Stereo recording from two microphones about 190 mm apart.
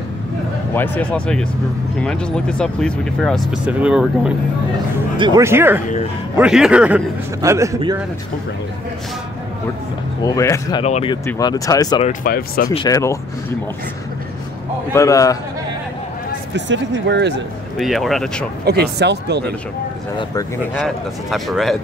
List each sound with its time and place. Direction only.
0.7 s speech: 5° left (ahead or behind)
5.1 s speech: 25° right (ahead or behind)
5.4 s a man's voice: 10° right (ahead or behind)
10.2 s speech: 15° left (ahead or behind)
10.8 s speech: 30° left (ahead or behind)
11.2 s speech: 20° left (ahead or behind)
12.0 s speech: 45° left (ahead or behind)
12.6 s speech: 20° left (ahead or behind)
14.9 s speech: 15° left (ahead or behind)
16.5 s speech: 75° right (ahead or behind)
17.7 s speech: centre (ahead or behind)
18.7 s speech: 60° right (ahead or behind)
20.7 s speech: centre (ahead or behind)